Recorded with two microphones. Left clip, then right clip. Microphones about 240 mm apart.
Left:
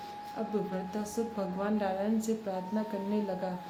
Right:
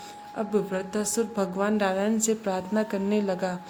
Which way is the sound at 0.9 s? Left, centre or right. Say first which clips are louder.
Right 9 dB; right.